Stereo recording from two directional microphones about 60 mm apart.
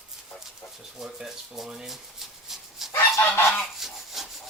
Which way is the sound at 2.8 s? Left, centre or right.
Centre.